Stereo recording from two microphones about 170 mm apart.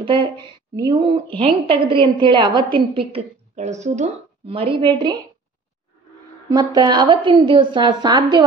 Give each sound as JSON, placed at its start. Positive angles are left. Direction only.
{"t": 0.0, "sound": "a woman's voice", "side_deg": -30}
{"t": 6.5, "sound": "a woman's voice", "side_deg": -25}